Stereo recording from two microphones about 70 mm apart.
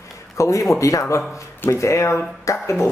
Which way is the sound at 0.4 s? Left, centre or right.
Left.